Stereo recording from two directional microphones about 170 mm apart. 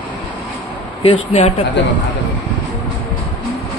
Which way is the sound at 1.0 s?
35° left (ahead or behind).